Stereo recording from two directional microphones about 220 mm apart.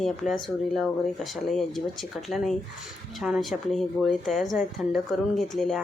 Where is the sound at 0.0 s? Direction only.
Centre (ahead or behind).